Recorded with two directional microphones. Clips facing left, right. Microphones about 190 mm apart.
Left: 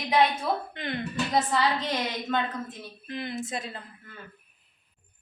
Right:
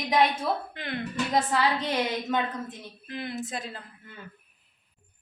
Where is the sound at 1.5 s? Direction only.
10° right (ahead or behind).